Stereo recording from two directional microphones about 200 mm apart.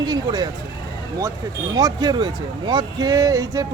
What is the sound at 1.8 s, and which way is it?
Speech, 20° right (ahead or behind).